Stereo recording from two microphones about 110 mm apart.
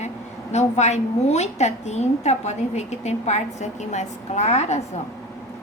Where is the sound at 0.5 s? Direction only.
90° left.